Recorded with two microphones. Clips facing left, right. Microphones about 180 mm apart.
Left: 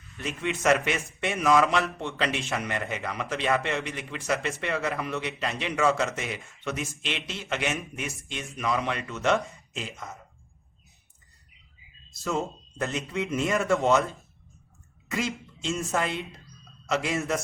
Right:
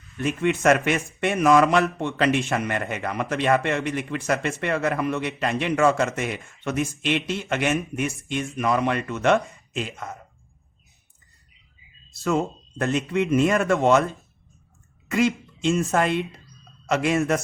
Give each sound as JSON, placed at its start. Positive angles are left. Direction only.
{"t": 0.2, "sound": "a man's voice", "side_deg": -55}
{"t": 12.8, "sound": "speech", "side_deg": -60}
{"t": 15.1, "sound": "speech", "side_deg": -60}